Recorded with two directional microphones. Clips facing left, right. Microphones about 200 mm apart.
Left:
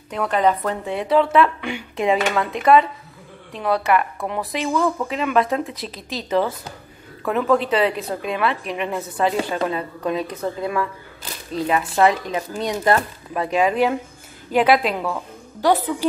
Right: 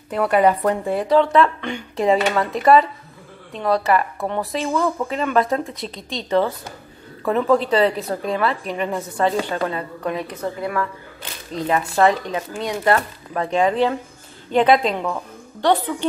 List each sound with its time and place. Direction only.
0.1 s speech: 10° right (ahead or behind)
9.6 s speech: 20° left (ahead or behind); by 12.2 s 5° left (ahead or behind)
12.3 s speech: 20° left (ahead or behind)
13.4 s speech: 10° left (ahead or behind)